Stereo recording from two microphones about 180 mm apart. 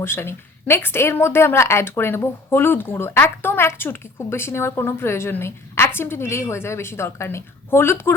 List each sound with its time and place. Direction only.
0.0 s a woman's voice: 15° left (ahead or behind)